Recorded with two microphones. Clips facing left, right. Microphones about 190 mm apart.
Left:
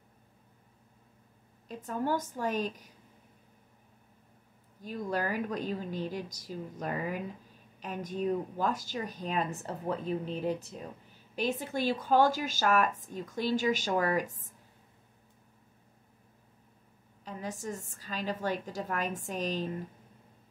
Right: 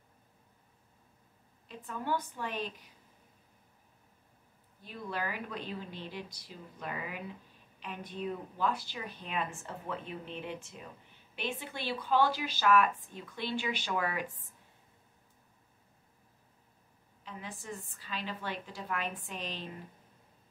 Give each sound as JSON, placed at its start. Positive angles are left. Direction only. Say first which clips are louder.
{"t": 1.7, "sound": "a woman's voice", "louder": "left 4 dB", "side_deg": 40}
{"t": 4.8, "sound": "a woman's voice", "louder": "left 5 dB", "side_deg": 45}
{"t": 17.2, "sound": "a woman's voice", "louder": "left 7 dB", "side_deg": 40}